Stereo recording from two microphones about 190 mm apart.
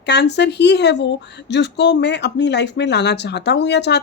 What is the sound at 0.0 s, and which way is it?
Speech, 65° left (ahead or behind).